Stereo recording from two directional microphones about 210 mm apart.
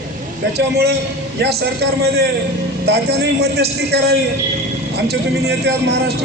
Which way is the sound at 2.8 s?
50° right (ahead or behind).